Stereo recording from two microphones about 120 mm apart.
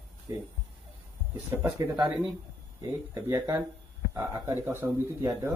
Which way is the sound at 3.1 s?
25° right (ahead or behind).